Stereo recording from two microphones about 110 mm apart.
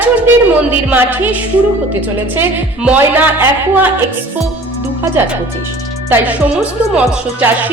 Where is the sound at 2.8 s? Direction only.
15° right (ahead or behind).